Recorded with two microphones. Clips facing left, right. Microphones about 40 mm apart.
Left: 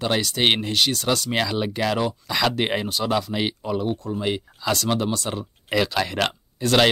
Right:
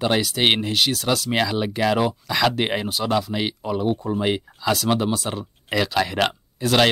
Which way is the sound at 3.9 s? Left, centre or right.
Right.